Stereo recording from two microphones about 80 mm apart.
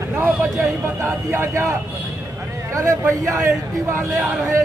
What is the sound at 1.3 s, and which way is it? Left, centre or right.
Speech, right.